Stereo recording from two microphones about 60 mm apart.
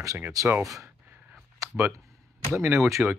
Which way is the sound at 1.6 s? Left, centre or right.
Right.